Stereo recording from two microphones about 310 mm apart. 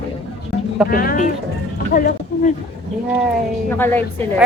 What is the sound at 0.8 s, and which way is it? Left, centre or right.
Speech, left.